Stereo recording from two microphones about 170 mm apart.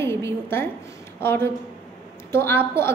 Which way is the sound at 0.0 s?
15° left (ahead or behind).